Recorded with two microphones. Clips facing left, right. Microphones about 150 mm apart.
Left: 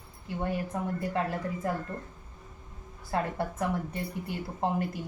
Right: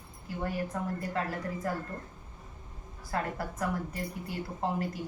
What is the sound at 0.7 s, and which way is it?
Speech, 20° left (ahead or behind).